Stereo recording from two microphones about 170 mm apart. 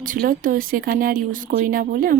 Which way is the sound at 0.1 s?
55° right (ahead or behind).